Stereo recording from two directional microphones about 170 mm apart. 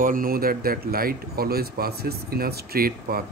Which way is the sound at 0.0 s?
55° right (ahead or behind).